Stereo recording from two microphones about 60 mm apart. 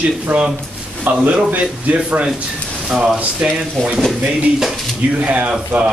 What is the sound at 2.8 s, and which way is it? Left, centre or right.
Speech, centre.